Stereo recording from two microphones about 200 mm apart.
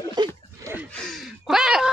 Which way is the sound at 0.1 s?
20° right (ahead or behind).